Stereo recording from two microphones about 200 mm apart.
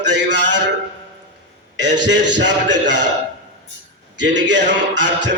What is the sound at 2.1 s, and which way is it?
A man's voice, 60° right (ahead or behind).